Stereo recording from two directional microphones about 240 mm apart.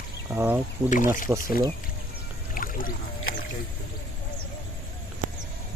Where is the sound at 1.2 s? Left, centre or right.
Centre.